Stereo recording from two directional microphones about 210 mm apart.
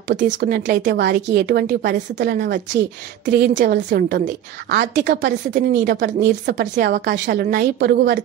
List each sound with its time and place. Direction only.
0.4 s a woman's voice: 55° right (ahead or behind)